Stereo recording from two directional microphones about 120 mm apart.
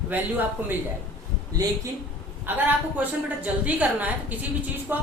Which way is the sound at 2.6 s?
15° right (ahead or behind).